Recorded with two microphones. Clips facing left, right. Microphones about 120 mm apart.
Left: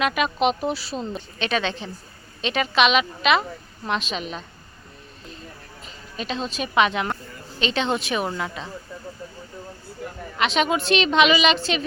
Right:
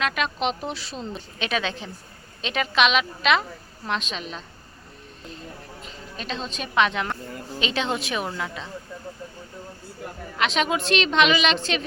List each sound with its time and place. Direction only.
0.0 s speech: 5° left (ahead or behind)
6.1 s speech: 5° left (ahead or behind)
10.3 s speech: centre (ahead or behind)